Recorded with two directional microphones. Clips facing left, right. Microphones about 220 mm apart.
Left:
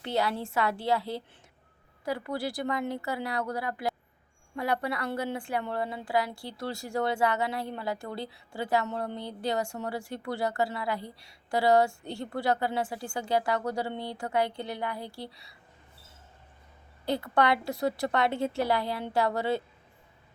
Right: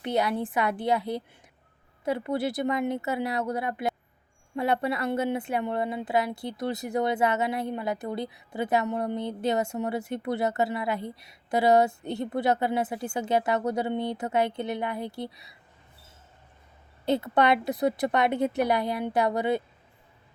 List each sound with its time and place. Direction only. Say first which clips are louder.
0.0 s a woman's voice: right 3 dB; 20° right (ahead or behind)
17.1 s a woman's voice: right 3 dB; 20° right (ahead or behind)